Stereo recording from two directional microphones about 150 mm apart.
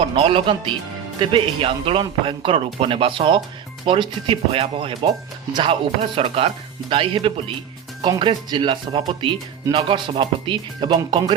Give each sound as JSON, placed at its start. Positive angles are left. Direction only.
{"t": 0.0, "sound": "speech", "side_deg": -40}
{"t": 8.0, "sound": "speech", "side_deg": -30}